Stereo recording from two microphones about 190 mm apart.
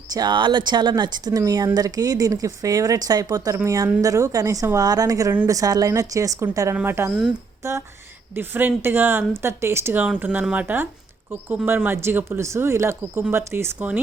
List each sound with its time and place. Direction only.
0.1 s speech: 20° right (ahead or behind)